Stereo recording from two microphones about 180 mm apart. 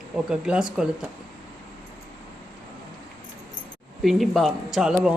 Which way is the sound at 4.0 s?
Centre (ahead or behind).